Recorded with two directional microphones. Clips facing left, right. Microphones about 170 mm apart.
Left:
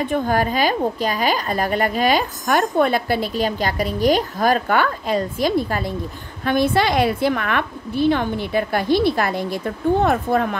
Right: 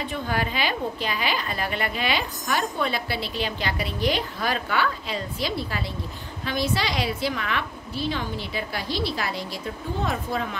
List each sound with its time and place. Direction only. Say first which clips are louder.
0.0 s a woman's voice: left 8 dB; 50° left (ahead or behind)